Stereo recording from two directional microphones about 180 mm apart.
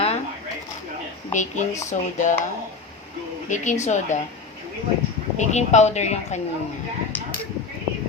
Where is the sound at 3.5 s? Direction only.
45° left (ahead or behind).